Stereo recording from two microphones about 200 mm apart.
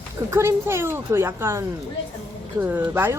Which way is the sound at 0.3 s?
15° right (ahead or behind).